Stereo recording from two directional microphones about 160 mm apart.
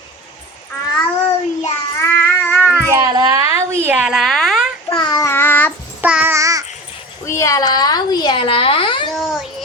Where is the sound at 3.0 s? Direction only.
25° right (ahead or behind); by 4.7 s centre (ahead or behind).